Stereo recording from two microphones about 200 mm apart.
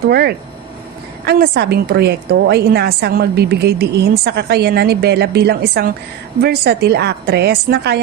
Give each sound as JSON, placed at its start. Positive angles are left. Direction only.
{"t": 0.1, "sound": "a woman's voice", "side_deg": -55}